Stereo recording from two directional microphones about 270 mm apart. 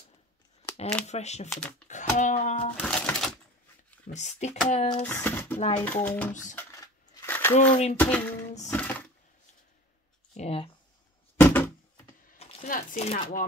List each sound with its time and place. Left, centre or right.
1.0 s speech: left
1.5 s speech: centre
1.9 s a sound: left
2.8 s music: centre
4.1 s speech: left
5.0 s speech: centre
5.6 s speech: left
5.9 s speech: centre
6.5 s coin: centre
7.5 s speech: left
8.0 s speech: centre
10.3 s speech: left
11.3 s cupboard open or close: centre
12.4 s speech: left